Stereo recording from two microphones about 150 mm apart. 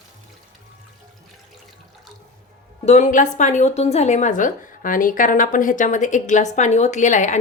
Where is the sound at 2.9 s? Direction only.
55° left (ahead or behind).